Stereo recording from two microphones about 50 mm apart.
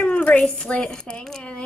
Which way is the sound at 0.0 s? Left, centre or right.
Left.